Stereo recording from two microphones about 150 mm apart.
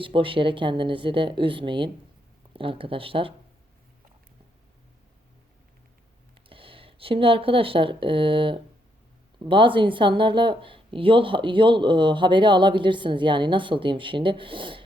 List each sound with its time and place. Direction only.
0.0 s speech: 35° right (ahead or behind)
6.5 s speech: 35° right (ahead or behind)